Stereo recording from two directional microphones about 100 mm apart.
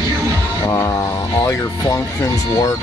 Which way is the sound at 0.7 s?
30° left (ahead or behind).